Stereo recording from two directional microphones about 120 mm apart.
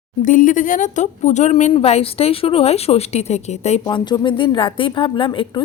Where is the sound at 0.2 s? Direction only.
90° left; by 1.7 s 75° left (ahead or behind).